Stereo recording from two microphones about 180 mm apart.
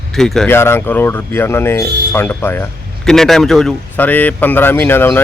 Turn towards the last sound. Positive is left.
turn(degrees=10)  # may be behind; listen again after turning